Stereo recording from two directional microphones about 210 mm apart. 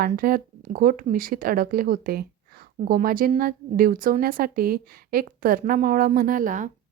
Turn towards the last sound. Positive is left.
turn(degrees=-40)  # may be behind; listen again after turning